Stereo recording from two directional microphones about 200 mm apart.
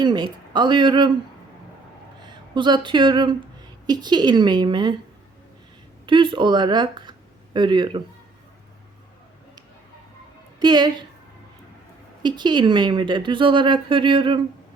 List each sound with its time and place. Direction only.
0.0 s speech: 20° right (ahead or behind)
2.2 s speech: 25° right (ahead or behind)
6.1 s speech: 25° right (ahead or behind)
10.6 s speech: 20° right (ahead or behind)
12.2 s speech: 20° right (ahead or behind)